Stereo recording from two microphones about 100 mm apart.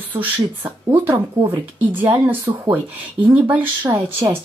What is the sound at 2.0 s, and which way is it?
Speech, 20° right (ahead or behind).